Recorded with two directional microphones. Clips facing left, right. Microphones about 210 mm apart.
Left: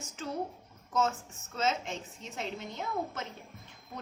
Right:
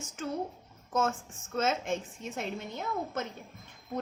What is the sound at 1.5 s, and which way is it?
Speech, 50° right (ahead or behind).